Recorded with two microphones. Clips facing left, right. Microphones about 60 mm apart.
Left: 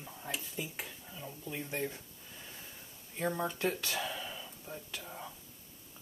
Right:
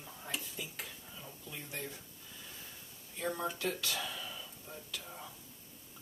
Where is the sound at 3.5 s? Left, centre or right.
Left.